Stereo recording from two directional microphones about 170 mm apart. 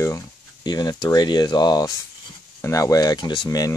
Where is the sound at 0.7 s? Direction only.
25° left (ahead or behind).